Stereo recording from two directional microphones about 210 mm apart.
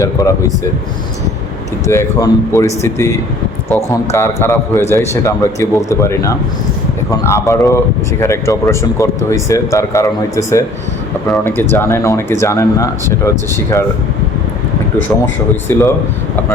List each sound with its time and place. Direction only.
0.0 s a man's voice: 15° left (ahead or behind)
1.9 s a man's voice: 15° left (ahead or behind)
15.7 s a man's voice: 10° left (ahead or behind)